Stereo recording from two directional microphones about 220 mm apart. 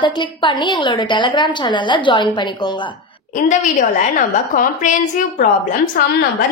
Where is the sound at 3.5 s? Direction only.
35° left (ahead or behind).